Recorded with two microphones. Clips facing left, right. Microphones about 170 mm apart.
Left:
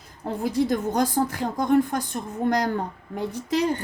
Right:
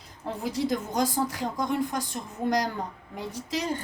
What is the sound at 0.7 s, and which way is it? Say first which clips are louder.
A woman's voice: left 4 dB; 55° left (ahead or behind).